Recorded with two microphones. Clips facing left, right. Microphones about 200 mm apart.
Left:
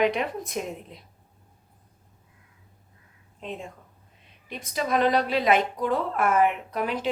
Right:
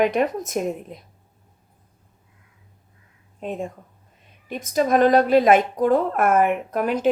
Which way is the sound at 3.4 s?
45° right (ahead or behind).